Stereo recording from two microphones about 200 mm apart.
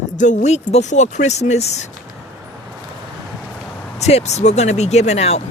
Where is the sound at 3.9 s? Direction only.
35° left (ahead or behind).